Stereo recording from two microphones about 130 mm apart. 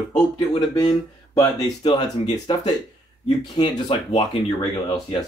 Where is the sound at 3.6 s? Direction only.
30° left (ahead or behind).